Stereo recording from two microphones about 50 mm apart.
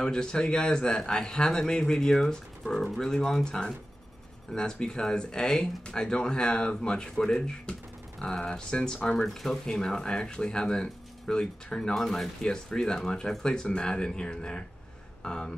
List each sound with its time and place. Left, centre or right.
0.0 s a man's voice: centre